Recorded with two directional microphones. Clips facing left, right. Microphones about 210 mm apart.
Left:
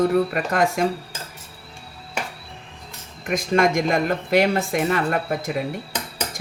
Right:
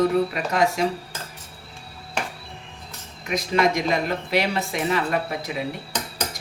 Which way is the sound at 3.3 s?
50° left (ahead or behind).